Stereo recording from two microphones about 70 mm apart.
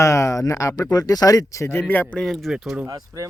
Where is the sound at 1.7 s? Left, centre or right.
Left.